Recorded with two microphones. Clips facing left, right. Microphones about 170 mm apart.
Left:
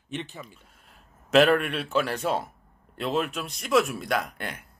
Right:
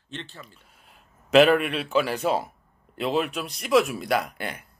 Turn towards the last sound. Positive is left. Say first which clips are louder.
# right 3 dB
turn(degrees=0)  # may be behind; listen again after turning